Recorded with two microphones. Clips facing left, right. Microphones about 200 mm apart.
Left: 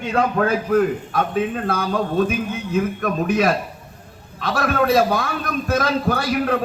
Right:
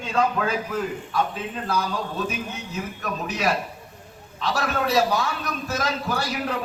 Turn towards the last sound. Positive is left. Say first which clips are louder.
# left 6 dB
turn(degrees=55)  # may be behind; listen again after turning